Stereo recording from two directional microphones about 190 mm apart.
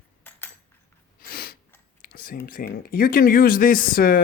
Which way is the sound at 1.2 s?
50° left (ahead or behind).